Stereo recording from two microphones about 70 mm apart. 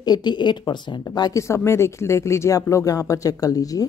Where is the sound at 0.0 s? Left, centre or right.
Left.